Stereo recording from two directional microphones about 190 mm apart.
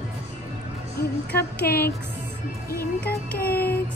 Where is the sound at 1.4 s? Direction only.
55° left (ahead or behind).